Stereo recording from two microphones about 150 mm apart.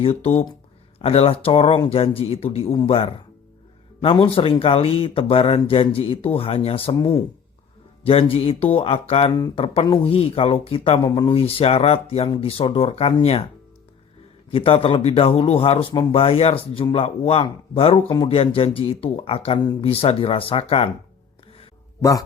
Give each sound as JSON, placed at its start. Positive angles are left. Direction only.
{"t": 0.0, "sound": "speech", "side_deg": 40}
{"t": 14.5, "sound": "speech", "side_deg": 35}